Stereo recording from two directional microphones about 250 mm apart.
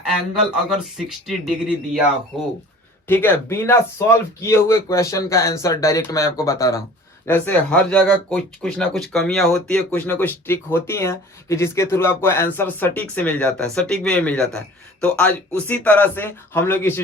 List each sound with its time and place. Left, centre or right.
0.9 s speech: centre
3.1 s speech: centre